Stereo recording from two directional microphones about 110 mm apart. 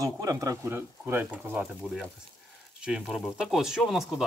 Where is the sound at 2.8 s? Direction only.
5° right (ahead or behind).